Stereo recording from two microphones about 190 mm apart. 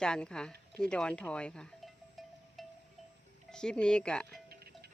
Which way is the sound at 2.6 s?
Centre (ahead or behind).